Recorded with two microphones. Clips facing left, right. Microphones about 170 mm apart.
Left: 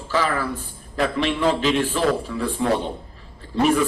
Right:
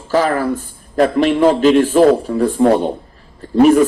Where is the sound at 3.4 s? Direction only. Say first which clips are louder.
Right 11 dB; 45° right (ahead or behind).